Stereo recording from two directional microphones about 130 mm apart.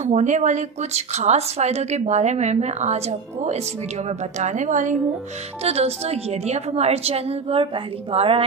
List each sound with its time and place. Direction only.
0.0 s a woman's voice: 65° right (ahead or behind)
5.6 s a woman's voice: 50° right (ahead or behind)